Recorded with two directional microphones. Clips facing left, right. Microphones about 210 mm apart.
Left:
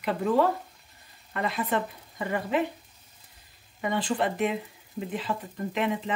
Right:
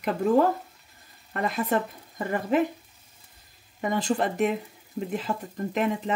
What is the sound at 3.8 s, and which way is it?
A woman's voice, 45° right (ahead or behind).